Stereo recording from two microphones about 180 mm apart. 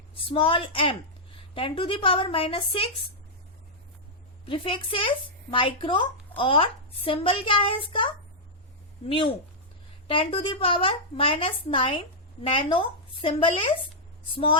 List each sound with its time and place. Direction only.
0.3 s a woman's voice: 30° left (ahead or behind)
4.4 s a woman's voice: 30° left (ahead or behind)